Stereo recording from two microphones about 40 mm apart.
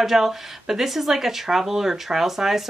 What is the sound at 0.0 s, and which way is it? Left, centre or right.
A woman's voice, centre.